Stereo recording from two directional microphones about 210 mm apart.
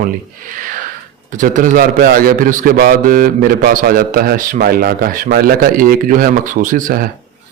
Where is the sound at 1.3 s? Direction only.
35° right (ahead or behind).